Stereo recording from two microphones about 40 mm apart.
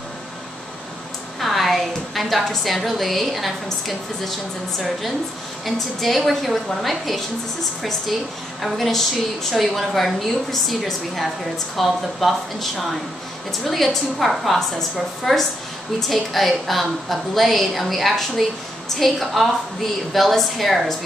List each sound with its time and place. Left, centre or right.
1.4 s a woman's voice: centre
8.5 s a woman's voice: centre